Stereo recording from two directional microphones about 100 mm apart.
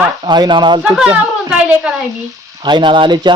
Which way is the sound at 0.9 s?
10° right (ahead or behind).